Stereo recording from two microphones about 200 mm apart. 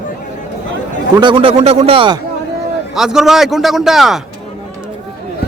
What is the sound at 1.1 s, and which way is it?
Speech, 25° right (ahead or behind).